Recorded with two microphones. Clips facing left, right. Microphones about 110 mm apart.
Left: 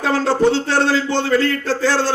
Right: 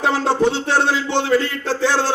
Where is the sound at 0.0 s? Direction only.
20° right (ahead or behind).